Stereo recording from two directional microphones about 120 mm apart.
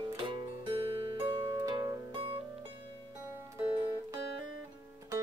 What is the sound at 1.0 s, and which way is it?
Music, 40° right (ahead or behind).